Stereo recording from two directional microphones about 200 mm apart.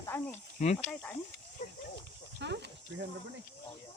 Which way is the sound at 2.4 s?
60° right (ahead or behind).